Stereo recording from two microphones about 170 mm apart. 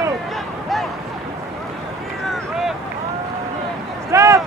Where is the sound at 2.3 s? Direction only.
Centre (ahead or behind).